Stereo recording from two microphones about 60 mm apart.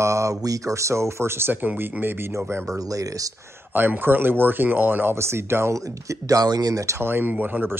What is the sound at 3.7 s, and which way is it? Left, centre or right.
Speech, right.